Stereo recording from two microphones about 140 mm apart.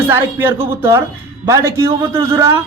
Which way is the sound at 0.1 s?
15° right (ahead or behind).